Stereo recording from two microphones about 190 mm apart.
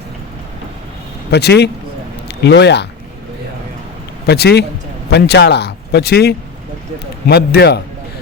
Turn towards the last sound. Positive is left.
turn(degrees=60)  # may be behind; listen again after turning